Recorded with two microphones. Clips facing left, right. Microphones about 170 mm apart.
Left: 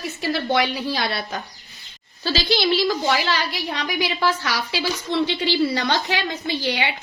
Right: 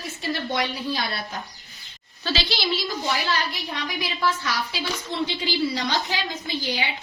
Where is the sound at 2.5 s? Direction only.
65° left (ahead or behind).